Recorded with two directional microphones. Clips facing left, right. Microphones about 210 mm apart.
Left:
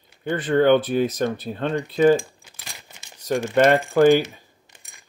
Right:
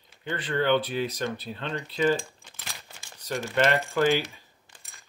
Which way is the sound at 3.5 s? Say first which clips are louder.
Left 7 dB; 50° left (ahead or behind).